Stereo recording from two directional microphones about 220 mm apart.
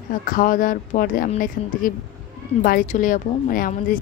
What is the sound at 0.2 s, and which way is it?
Speech, 40° left (ahead or behind).